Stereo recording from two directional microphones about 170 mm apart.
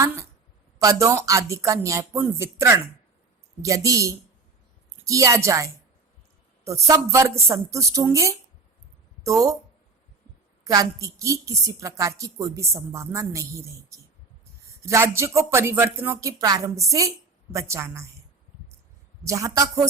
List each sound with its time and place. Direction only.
0.8 s a woman's voice: 20° right (ahead or behind)
10.6 s a woman's voice: 20° right (ahead or behind)
19.2 s a woman's voice: 20° right (ahead or behind)